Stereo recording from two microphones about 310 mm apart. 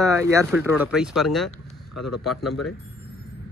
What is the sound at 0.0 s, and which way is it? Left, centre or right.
Speech, centre.